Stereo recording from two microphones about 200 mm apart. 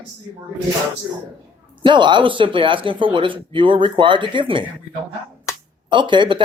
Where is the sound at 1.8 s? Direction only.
25° right (ahead or behind).